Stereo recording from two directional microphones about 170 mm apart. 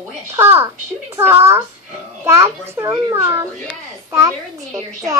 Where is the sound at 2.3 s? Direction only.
15° right (ahead or behind).